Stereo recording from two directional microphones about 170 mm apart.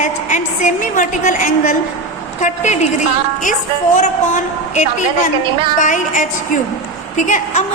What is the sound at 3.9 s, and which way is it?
A woman's voice, 45° left (ahead or behind).